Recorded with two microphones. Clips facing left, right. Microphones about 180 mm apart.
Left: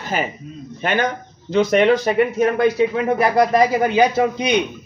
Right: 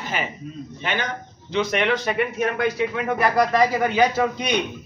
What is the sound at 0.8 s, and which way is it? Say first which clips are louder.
A man's voice: left 7 dB; 45° left (ahead or behind).